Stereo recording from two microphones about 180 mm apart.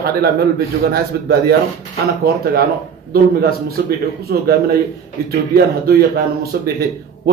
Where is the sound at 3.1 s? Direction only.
55° right (ahead or behind).